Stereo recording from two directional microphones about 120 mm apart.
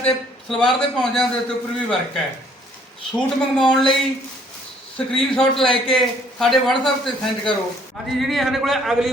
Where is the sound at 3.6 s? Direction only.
5° left (ahead or behind).